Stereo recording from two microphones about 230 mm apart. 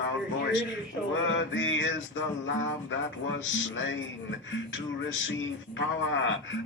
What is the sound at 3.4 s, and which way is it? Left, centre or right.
Speech, left.